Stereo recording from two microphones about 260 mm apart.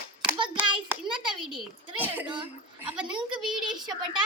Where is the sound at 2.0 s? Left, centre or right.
Centre.